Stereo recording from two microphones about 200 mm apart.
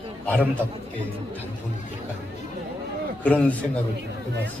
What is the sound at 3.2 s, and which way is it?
Speech, 5° left (ahead or behind).